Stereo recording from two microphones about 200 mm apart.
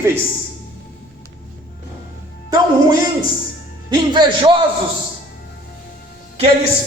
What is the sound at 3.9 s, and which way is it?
Speech, 25° right (ahead or behind).